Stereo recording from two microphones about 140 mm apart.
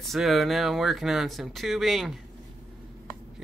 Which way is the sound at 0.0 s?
Centre (ahead or behind).